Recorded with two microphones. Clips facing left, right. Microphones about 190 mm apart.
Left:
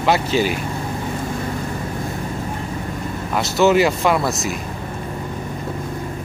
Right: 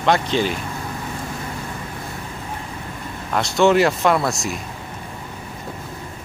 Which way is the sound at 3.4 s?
Centre (ahead or behind).